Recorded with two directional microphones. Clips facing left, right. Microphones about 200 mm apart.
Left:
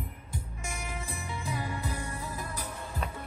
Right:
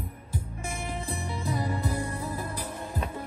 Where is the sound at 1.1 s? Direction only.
35° right (ahead or behind).